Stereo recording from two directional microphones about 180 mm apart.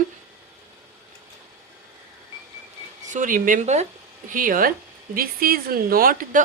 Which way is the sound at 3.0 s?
45° right (ahead or behind).